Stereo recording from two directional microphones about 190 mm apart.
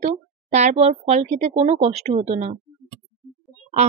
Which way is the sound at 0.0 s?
35° right (ahead or behind).